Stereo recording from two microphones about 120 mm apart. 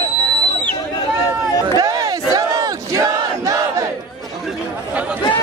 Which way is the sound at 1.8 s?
30° right (ahead or behind).